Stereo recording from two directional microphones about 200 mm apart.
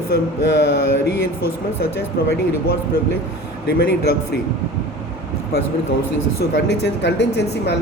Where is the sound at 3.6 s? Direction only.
55° left (ahead or behind).